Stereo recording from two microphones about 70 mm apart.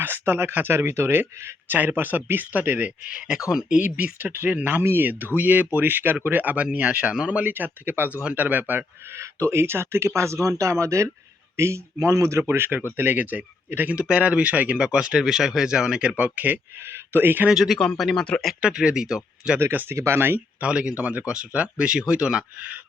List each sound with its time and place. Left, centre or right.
0.0 s speech: right
9.0 s speech: right
12.5 s speech: right
17.5 s speech: centre
17.7 s speech: centre
18.6 s speech: centre
19.9 s speech: right
20.6 s speech: centre